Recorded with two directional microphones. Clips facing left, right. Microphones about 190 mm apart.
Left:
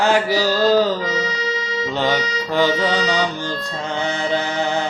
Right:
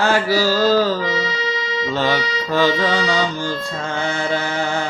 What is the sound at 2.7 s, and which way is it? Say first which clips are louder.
Music: even; 20° left (ahead or behind).